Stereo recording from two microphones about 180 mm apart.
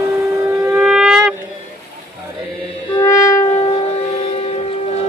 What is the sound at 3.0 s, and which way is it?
Music, 15° left (ahead or behind).